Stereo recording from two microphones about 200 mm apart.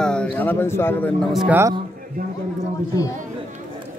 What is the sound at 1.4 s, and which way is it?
Speech, 10° right (ahead or behind).